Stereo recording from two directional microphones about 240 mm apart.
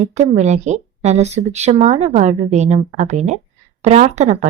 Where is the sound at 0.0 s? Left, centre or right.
Right.